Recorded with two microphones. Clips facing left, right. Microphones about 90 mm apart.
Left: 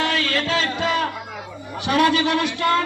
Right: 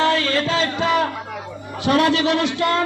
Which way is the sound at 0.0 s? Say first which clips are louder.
Right 4 dB; 30° right (ahead or behind).